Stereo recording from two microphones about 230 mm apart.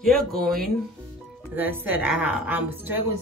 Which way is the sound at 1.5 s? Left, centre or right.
Centre.